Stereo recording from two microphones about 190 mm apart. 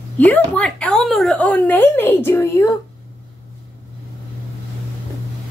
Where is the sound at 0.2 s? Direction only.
10° left (ahead or behind).